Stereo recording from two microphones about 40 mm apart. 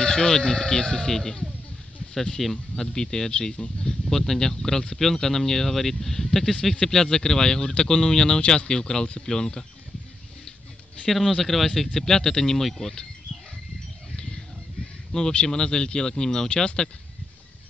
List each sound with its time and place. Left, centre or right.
0.0 s speech: centre
2.5 s speech: centre
11.1 s speech: centre
14.1 s a sound: left
15.4 s speech: centre